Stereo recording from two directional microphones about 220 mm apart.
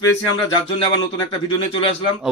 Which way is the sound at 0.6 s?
20° left (ahead or behind).